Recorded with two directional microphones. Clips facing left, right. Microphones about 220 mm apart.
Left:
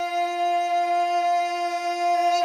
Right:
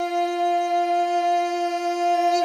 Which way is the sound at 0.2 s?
40° right (ahead or behind).